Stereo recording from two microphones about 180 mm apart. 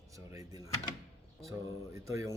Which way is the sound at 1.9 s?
15° right (ahead or behind).